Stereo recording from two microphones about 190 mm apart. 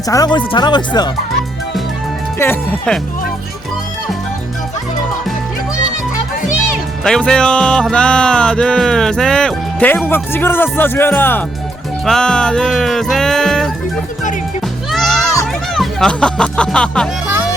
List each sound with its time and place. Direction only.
0.1 s speech: 20° left (ahead or behind)
2.4 s speech: 10° left (ahead or behind)
7.0 s music: 5° left (ahead or behind)
10.3 s speech: 10° left (ahead or behind)
12.0 s music: 5° left (ahead or behind)
14.8 s music: centre (ahead or behind)
15.7 s speech: centre (ahead or behind)